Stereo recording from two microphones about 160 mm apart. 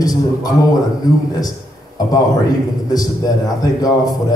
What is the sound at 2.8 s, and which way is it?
A man's voice, 25° left (ahead or behind).